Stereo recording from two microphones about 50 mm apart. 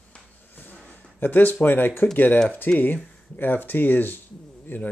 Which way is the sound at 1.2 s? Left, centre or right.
Left.